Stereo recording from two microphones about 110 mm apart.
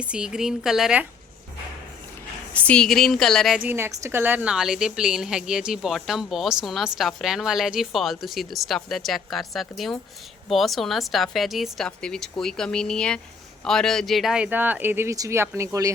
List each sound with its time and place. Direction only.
0.0 s a woman's voice: 10° right (ahead or behind)
2.5 s a woman's voice: 10° left (ahead or behind)
3.6 s a woman's voice: 20° right (ahead or behind)